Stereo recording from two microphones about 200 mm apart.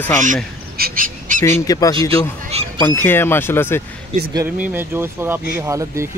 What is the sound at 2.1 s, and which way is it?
Speech, 30° right (ahead or behind).